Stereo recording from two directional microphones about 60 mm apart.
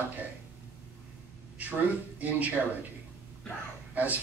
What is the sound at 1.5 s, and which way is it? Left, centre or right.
Speech, right.